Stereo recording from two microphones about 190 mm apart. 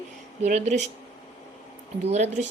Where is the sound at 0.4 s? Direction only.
35° right (ahead or behind).